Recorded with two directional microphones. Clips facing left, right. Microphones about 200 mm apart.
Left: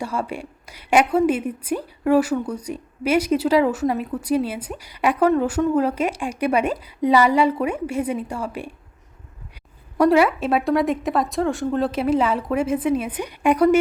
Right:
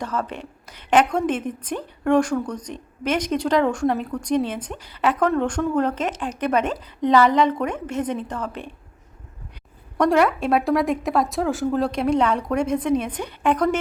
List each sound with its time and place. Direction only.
0.0 s a woman's voice: 10° left (ahead or behind)
10.0 s a woman's voice: 5° left (ahead or behind)